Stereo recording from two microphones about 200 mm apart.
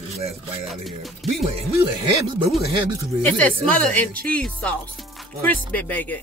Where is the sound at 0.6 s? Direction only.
Centre (ahead or behind).